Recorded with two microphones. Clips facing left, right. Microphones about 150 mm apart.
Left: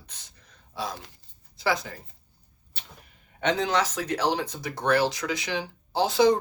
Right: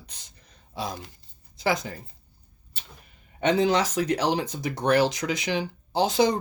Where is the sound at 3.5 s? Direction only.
10° right (ahead or behind).